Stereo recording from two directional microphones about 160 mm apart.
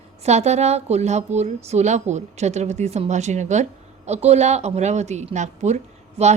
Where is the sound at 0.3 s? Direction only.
45° right (ahead or behind).